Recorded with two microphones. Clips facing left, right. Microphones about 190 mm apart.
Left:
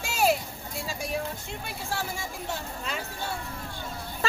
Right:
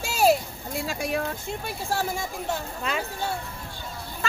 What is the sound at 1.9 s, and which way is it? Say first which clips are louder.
Speech: right 5 dB; 40° right (ahead or behind).